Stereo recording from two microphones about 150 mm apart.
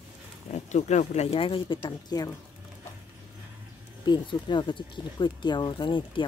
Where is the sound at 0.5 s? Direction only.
50° left (ahead or behind); by 2.3 s 25° left (ahead or behind).